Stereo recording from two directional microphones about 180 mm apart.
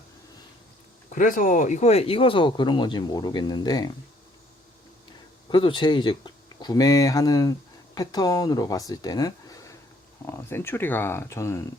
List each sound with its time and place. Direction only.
1.1 s speech: 45° left (ahead or behind); by 3.9 s 20° left (ahead or behind)
5.5 s speech: 25° left (ahead or behind)